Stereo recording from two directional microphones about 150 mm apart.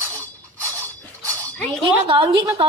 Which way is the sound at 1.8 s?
30° right (ahead or behind).